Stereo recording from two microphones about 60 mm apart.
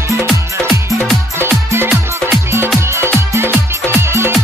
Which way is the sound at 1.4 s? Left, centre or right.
Right.